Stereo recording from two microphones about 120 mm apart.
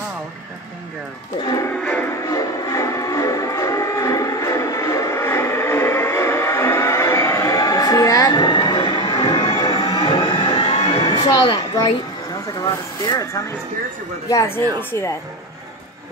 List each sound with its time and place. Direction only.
1.7 s music: 10° left (ahead or behind)
2.2 s music: 30° left (ahead or behind); by 11.5 s 45° left (ahead or behind)
11.5 s a woman's voice: 35° left (ahead or behind); by 15.1 s 20° left (ahead or behind)